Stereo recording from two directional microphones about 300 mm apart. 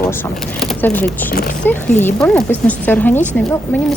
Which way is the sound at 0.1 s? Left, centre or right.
Centre.